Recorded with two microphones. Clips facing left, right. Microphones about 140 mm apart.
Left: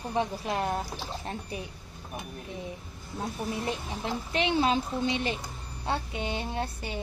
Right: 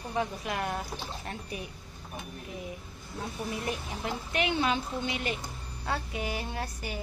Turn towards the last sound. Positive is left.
turn(degrees=25)  # may be behind; listen again after turning